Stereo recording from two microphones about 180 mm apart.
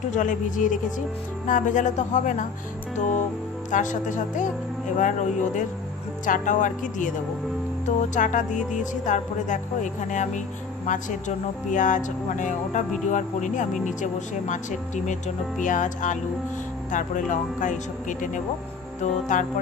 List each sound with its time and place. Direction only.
0.1 s speech: 45° left (ahead or behind)
3.7 s speech: 45° left (ahead or behind)